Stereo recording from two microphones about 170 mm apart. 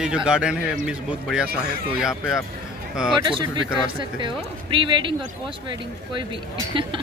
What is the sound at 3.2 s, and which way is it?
Speech, 30° right (ahead or behind).